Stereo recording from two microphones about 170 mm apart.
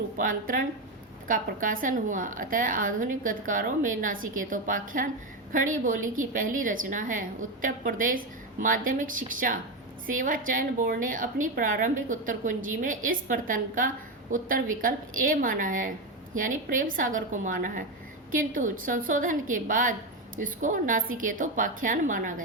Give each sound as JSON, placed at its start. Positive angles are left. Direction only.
{"t": 0.2, "sound": "a woman's voice", "side_deg": -55}